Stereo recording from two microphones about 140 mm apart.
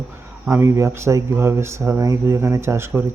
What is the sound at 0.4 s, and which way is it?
Speech, 15° right (ahead or behind).